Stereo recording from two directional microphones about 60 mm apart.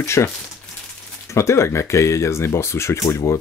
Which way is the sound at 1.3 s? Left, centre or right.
Left.